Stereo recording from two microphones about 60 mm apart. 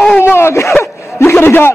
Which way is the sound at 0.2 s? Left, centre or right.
Left.